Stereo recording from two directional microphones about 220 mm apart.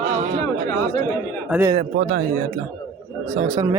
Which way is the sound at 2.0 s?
40° right (ahead or behind).